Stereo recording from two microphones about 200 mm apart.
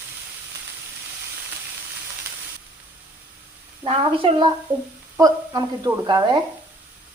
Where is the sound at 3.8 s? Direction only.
25° right (ahead or behind).